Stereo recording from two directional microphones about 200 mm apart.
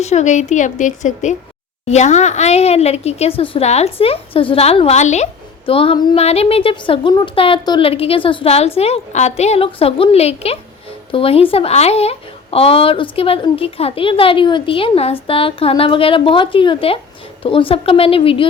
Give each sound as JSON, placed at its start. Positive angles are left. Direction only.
{"t": 0.0, "sound": "a woman's voice", "side_deg": 35}